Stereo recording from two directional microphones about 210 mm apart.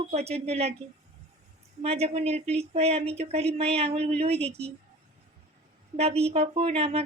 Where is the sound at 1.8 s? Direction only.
30° right (ahead or behind).